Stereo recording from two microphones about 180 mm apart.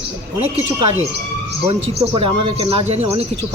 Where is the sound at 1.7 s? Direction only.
35° right (ahead or behind).